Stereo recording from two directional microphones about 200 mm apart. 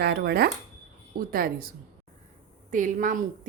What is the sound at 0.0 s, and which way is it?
A woman's voice, 50° right (ahead or behind).